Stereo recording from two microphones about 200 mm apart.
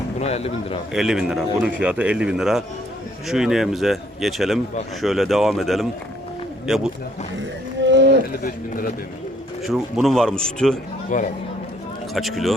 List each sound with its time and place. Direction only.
0.2 s speech: 30° left (ahead or behind)
0.9 s a man's voice: centre (ahead or behind)
7.9 s a sound: 60° right (ahead or behind)
8.4 s a man's voice: 45° left (ahead or behind)
9.6 s a man's voice: centre (ahead or behind)
11.1 s speech: 40° left (ahead or behind)
12.1 s a man's voice: centre (ahead or behind)